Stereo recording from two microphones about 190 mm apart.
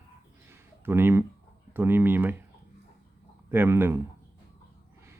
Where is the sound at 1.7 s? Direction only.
10° right (ahead or behind).